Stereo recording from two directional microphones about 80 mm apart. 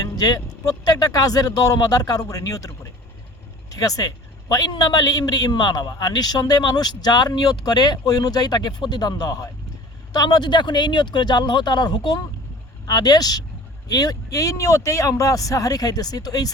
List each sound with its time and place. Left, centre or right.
0.0 s a man's voice: left
10.1 s speech: left